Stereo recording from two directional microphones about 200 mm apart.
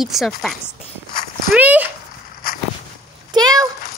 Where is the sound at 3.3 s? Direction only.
20° right (ahead or behind).